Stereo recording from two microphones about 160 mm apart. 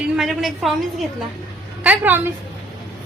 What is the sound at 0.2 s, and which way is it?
A woman's voice, centre (ahead or behind).